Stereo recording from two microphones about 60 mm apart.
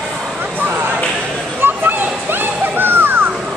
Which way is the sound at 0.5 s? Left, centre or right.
Right.